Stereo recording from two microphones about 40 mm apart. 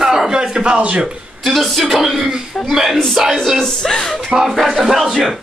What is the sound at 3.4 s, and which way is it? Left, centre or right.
Speech, centre.